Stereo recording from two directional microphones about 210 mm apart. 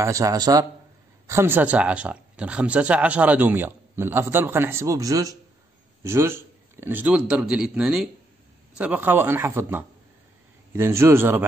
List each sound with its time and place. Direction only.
0.0 s speech: 15° right (ahead or behind)